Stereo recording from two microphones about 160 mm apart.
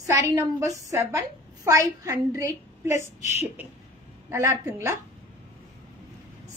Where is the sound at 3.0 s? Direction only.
45° left (ahead or behind).